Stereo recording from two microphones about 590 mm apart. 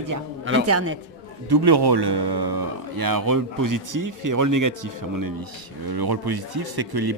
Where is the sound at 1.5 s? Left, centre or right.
Right.